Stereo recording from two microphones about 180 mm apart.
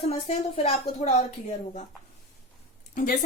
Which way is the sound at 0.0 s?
35° left (ahead or behind).